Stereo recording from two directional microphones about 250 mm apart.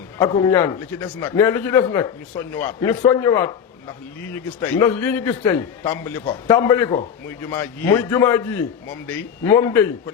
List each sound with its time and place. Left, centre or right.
0.3 s a man's voice: centre